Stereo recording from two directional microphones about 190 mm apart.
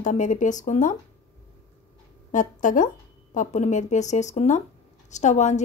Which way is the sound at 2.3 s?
40° left (ahead or behind).